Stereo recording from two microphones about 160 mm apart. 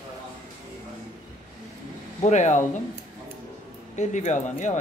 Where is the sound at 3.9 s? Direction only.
50° left (ahead or behind).